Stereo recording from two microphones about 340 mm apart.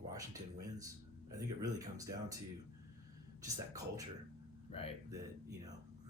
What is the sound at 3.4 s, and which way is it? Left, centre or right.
Speech, centre.